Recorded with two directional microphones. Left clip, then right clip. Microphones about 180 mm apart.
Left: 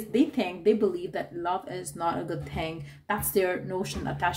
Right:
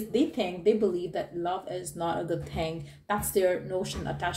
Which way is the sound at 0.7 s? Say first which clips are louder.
Even; 40° left (ahead or behind).